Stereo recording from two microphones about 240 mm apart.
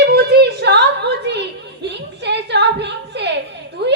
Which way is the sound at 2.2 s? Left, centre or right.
Right.